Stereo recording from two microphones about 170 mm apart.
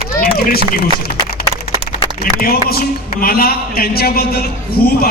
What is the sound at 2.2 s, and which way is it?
A man's voice, 60° left (ahead or behind).